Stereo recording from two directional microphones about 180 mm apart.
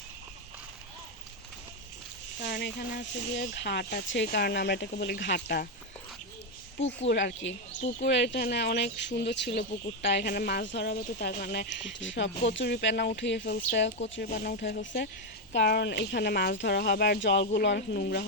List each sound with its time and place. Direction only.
2.4 s speech: 70° left (ahead or behind)
7.1 s speech: 75° left (ahead or behind)
8.0 s speech: 75° left (ahead or behind); by 10.7 s 55° left (ahead or behind)
10.7 s speech: 75° left (ahead or behind)
10.9 s speech: 50° left (ahead or behind); by 11.9 s 70° left (ahead or behind)
11.9 s speech: 90° left
12.5 s speech: 75° left (ahead or behind)
14.3 s speech: 55° left (ahead or behind)